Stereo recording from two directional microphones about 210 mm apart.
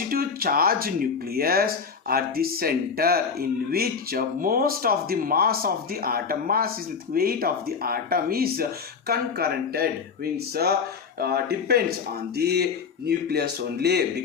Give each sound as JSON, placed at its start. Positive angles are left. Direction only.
{"t": 0.1, "sound": "speech", "side_deg": -45}